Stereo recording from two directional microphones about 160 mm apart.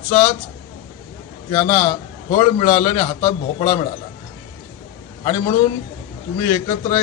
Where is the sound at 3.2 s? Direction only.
40° left (ahead or behind).